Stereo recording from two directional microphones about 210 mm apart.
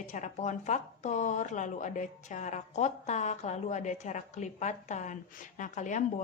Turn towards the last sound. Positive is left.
turn(degrees=35)  # may be behind; listen again after turning